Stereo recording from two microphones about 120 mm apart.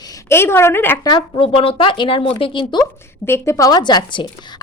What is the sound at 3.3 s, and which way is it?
A woman's voice, 25° left (ahead or behind).